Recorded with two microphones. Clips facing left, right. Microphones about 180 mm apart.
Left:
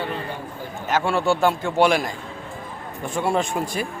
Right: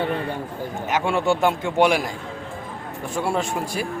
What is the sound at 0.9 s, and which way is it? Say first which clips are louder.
A man's voice: left 1 dB; 15° right (ahead or behind).